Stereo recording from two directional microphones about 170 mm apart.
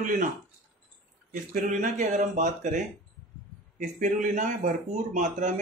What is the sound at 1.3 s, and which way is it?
Speech, 50° right (ahead or behind).